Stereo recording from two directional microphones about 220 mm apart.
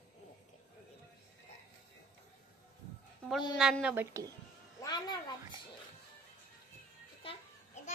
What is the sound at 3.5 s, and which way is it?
Speech, 5° right (ahead or behind).